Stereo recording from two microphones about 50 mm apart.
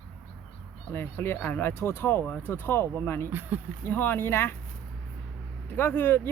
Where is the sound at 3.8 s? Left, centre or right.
Left.